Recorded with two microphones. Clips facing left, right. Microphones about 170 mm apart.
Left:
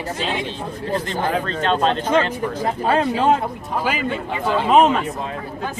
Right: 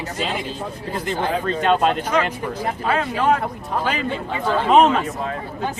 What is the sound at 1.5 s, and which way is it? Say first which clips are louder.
Speech: right 2 dB; 15° right (ahead or behind).